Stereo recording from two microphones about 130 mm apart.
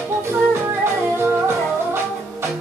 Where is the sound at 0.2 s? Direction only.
20° right (ahead or behind).